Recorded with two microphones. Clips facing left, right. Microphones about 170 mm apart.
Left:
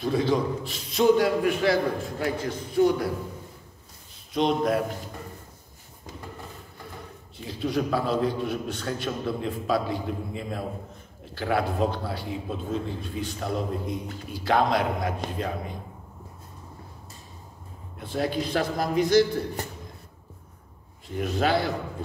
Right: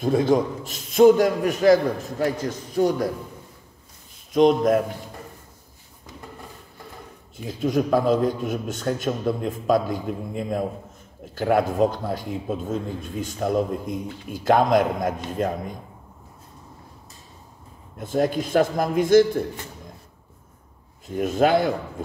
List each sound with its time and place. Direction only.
0.0 s a man's voice: 50° right (ahead or behind)
4.3 s a man's voice: 45° right (ahead or behind)
7.4 s a man's voice: 45° right (ahead or behind)
17.9 s a man's voice: 45° right (ahead or behind)
21.1 s a man's voice: 45° right (ahead or behind)